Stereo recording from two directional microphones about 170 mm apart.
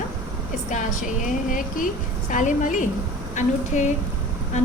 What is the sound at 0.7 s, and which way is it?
A woman's voice, 50° left (ahead or behind).